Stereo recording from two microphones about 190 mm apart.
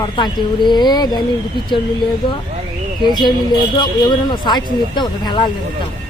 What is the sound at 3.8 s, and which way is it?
Speech, 20° left (ahead or behind).